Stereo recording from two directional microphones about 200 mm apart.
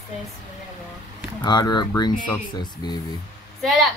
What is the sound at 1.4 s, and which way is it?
Speech, 20° left (ahead or behind).